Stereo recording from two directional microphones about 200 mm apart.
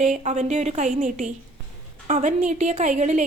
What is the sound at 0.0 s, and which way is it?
A woman's voice, 35° right (ahead or behind).